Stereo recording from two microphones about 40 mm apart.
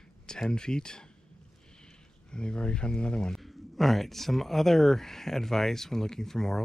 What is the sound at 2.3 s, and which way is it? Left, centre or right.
Speech, left.